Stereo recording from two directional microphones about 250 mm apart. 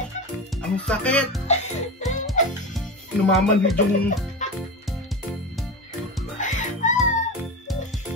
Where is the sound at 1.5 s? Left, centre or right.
Left.